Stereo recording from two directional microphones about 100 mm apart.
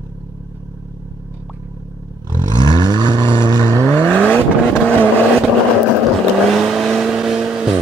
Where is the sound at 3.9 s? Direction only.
15° left (ahead or behind).